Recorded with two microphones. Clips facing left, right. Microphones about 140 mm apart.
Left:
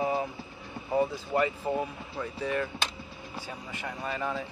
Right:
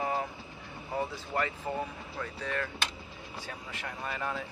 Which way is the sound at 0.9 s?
15° left (ahead or behind).